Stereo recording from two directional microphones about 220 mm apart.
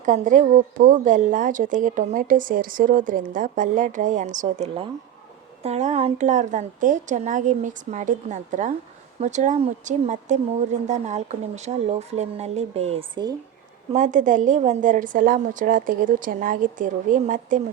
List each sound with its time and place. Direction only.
0.0 s a woman's voice: 35° right (ahead or behind)
13.9 s a woman's voice: 35° right (ahead or behind)